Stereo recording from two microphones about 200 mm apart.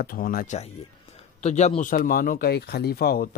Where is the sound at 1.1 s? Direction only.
35° left (ahead or behind).